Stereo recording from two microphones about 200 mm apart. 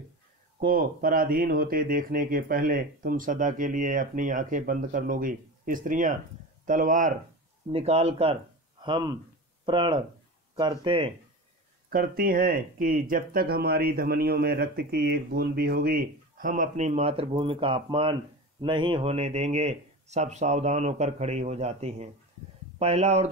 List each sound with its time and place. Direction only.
0.6 s speech: 45° right (ahead or behind); by 11.1 s 25° right (ahead or behind)
11.9 s speech: 45° right (ahead or behind)